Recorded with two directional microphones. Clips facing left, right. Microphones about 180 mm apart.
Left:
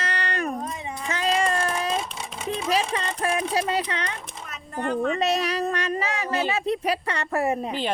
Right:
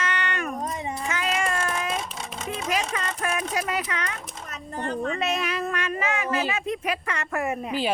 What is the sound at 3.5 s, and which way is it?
Speech, 30° left (ahead or behind).